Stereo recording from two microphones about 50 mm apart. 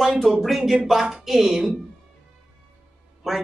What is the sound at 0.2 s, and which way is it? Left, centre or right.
A woman's voice, centre.